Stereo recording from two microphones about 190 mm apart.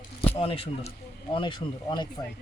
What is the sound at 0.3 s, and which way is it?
Speech, 30° left (ahead or behind).